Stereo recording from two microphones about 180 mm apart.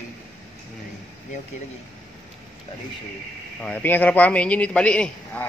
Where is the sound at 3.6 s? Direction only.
10° left (ahead or behind).